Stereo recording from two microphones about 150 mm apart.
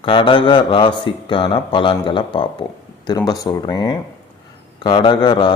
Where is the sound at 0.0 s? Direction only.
35° left (ahead or behind).